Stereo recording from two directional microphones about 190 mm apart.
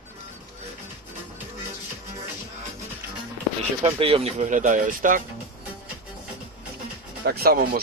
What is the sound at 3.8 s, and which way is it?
Speech, 30° right (ahead or behind).